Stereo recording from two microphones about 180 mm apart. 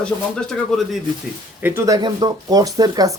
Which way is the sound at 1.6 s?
15° right (ahead or behind).